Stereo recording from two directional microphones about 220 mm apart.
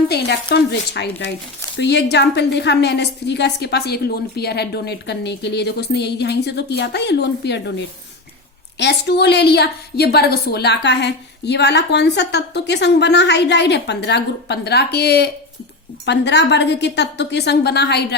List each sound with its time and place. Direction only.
0.1 s a woman's voice: 45° left (ahead or behind)